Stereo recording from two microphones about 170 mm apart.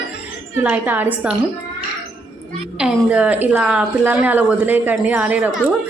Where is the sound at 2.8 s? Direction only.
5° right (ahead or behind).